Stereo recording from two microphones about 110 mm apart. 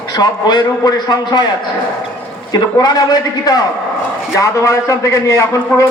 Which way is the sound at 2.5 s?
40° left (ahead or behind).